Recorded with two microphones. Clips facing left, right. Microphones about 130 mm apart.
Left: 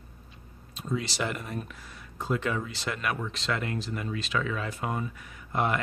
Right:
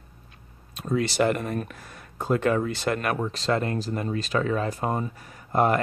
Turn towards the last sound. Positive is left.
turn(degrees=-40)  # may be behind; listen again after turning